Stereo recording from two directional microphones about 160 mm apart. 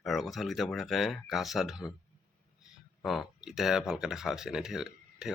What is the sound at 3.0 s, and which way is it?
Speech, centre (ahead or behind).